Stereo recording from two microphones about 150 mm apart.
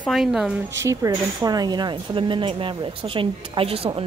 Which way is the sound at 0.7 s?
20° right (ahead or behind).